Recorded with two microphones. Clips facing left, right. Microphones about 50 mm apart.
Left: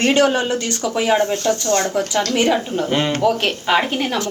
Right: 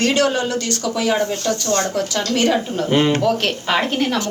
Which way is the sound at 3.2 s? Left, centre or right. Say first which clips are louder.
Left 1 dB; centre.